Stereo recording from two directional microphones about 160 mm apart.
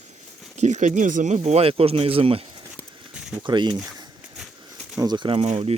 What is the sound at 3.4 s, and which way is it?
Speech, 30° right (ahead or behind).